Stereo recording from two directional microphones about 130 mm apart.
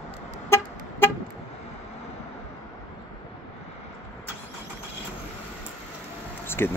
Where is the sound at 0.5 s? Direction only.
15° left (ahead or behind).